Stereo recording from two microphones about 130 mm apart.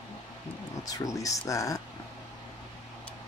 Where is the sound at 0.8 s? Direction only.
25° left (ahead or behind).